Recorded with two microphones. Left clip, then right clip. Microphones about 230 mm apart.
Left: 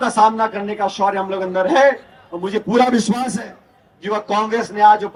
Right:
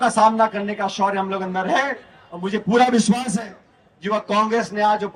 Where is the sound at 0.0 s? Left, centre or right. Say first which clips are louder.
Left 1 dB; right.